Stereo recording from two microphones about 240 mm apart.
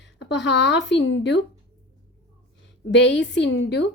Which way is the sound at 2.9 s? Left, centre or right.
Left.